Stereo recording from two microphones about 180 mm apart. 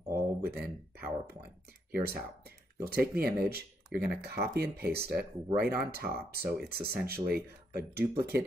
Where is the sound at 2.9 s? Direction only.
60° right (ahead or behind).